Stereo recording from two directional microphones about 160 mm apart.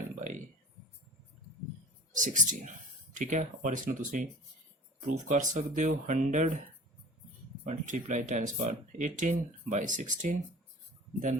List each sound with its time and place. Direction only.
0.2 s a sound: 55° right (ahead or behind)
2.1 s speech: 55° right (ahead or behind)
7.6 s speech: 50° right (ahead or behind)